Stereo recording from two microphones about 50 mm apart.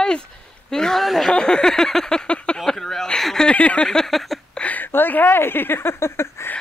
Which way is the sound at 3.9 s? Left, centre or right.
Centre.